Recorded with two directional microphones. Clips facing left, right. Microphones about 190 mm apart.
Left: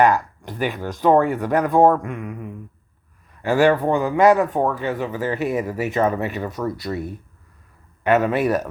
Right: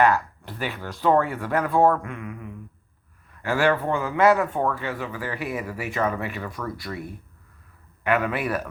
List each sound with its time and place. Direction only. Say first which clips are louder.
0.0 s speech: left 3 dB; 15° left (ahead or behind)
3.4 s speech: left 5 dB; 15° left (ahead or behind)
8.0 s speech: left 5 dB; 25° left (ahead or behind)
8.4 s speech: left 7 dB; 40° left (ahead or behind)